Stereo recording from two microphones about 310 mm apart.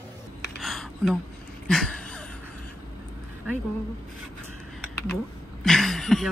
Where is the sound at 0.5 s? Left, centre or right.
Centre.